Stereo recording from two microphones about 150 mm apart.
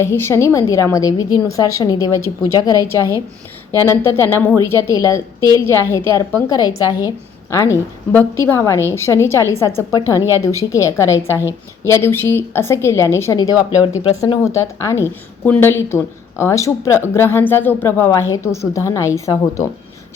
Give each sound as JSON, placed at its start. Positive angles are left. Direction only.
{"t": 0.0, "sound": "a woman's voice", "side_deg": 15}
{"t": 13.7, "sound": "speech", "side_deg": 35}
{"t": 14.4, "sound": "a woman's voice", "side_deg": 20}